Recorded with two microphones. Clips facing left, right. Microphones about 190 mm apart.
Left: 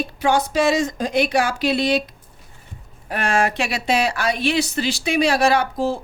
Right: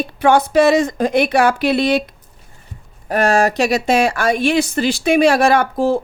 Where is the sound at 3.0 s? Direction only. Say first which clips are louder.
Right 6 dB; 40° right (ahead or behind).